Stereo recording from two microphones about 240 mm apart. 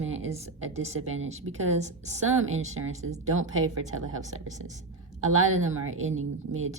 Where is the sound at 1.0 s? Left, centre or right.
Right.